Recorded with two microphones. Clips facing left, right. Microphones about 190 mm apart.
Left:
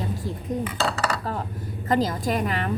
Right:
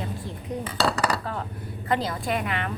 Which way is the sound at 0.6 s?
35° right (ahead or behind).